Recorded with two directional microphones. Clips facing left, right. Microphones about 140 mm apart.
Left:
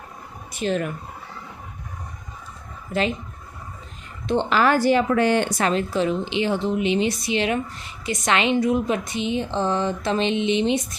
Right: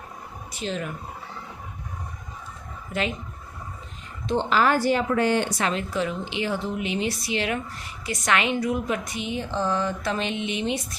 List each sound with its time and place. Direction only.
0.5 s speech: 55° left (ahead or behind)
2.9 s speech: 30° left (ahead or behind)
4.3 s speech: 70° left (ahead or behind)
5.5 s a woman's voice: 45° left (ahead or behind); by 10.8 s 25° left (ahead or behind)